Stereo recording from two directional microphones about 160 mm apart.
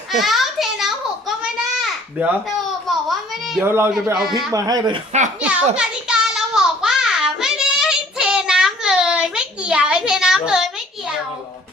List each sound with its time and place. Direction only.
0.1 s a sound: centre (ahead or behind)
3.6 s a child's voice: 15° right (ahead or behind)
3.9 s a man's voice: centre (ahead or behind)
4.5 s speech: 20° right (ahead or behind)
5.4 s a child's voice: 10° right (ahead or behind)
5.7 s child singing: 5° right (ahead or behind)